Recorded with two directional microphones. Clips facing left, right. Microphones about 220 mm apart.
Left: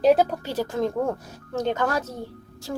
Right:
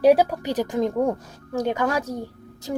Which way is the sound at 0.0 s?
10° right (ahead or behind).